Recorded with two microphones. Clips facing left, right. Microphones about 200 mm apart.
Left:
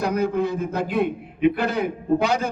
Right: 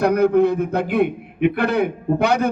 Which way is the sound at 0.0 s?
60° right (ahead or behind).